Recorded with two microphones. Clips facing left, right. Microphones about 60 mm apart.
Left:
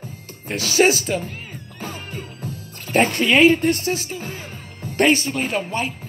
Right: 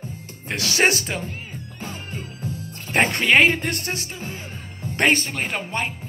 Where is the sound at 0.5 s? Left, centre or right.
Right.